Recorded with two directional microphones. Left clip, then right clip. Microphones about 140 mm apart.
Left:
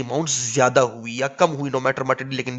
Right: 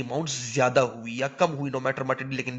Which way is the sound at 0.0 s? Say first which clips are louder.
Left 6 dB; 45° left (ahead or behind).